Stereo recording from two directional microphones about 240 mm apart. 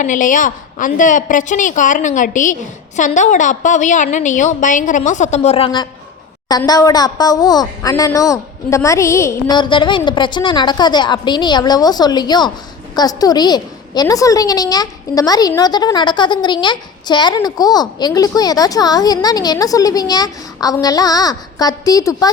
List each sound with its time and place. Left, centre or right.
0.0 s a woman's voice: left; by 22.3 s centre